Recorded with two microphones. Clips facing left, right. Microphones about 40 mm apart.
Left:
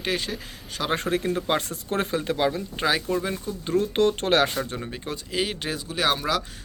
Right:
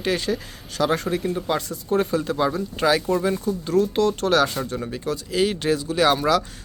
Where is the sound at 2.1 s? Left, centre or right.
Left.